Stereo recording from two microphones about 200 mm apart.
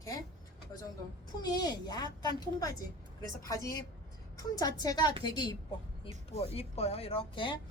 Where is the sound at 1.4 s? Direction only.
20° left (ahead or behind).